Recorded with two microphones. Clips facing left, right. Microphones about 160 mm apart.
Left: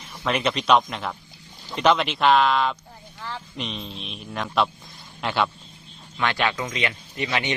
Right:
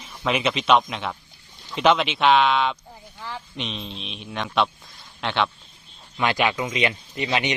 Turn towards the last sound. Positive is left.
turn(degrees=-20)  # may be behind; listen again after turning